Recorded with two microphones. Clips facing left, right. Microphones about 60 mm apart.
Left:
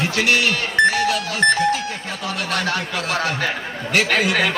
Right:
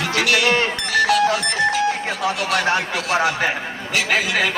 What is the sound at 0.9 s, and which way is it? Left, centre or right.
Speech, left.